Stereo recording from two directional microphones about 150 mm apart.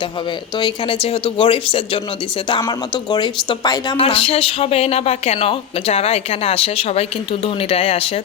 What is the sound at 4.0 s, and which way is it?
Speech, 40° left (ahead or behind).